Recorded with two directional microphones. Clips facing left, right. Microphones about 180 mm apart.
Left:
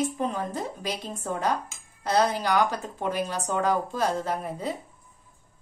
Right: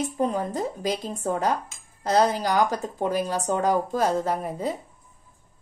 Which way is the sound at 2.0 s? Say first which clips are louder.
Right 3 dB; 40° right (ahead or behind).